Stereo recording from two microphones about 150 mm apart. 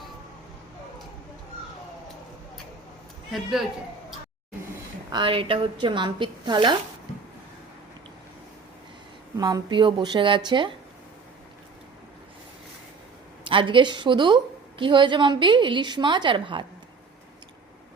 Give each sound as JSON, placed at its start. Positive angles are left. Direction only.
{"t": 5.1, "sound": "a woman's voice", "side_deg": -35}
{"t": 9.4, "sound": "a woman's voice", "side_deg": -25}
{"t": 13.4, "sound": "a woman's voice", "side_deg": -35}